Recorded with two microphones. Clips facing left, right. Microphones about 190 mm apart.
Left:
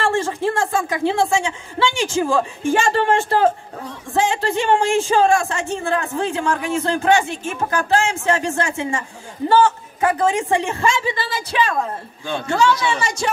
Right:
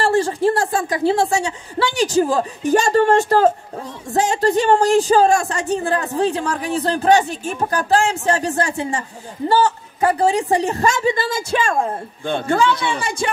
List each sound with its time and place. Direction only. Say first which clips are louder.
0.0 s a woman's voice: right 3 dB; 35° right (ahead or behind); by 12.9 s 55° right (ahead or behind)